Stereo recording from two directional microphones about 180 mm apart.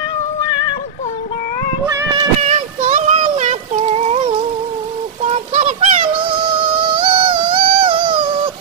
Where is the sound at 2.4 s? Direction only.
35° right (ahead or behind).